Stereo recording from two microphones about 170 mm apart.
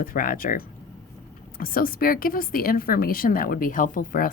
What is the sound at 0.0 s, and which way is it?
Speech, 55° left (ahead or behind).